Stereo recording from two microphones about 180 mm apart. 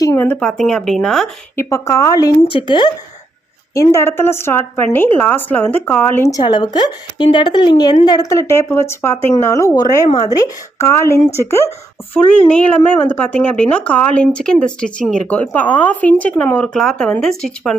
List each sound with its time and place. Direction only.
0.0 s a woman's voice: 15° left (ahead or behind)
1.5 s a woman's voice: 15° left (ahead or behind)